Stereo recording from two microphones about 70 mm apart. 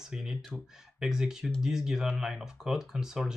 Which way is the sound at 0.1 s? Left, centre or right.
Centre.